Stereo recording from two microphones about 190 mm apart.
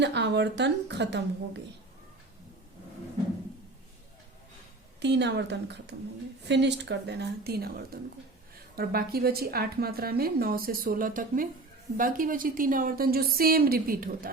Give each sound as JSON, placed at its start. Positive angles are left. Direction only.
{"t": 0.0, "sound": "a woman's voice", "side_deg": -65}
{"t": 4.9, "sound": "a woman's voice", "side_deg": -65}